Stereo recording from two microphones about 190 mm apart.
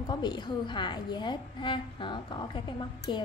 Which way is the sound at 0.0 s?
20° left (ahead or behind).